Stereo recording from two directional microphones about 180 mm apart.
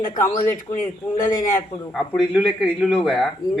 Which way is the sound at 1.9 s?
Centre (ahead or behind).